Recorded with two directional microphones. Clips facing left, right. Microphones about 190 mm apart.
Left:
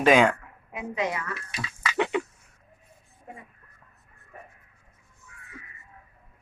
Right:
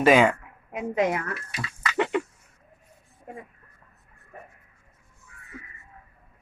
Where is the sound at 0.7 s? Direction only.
50° right (ahead or behind).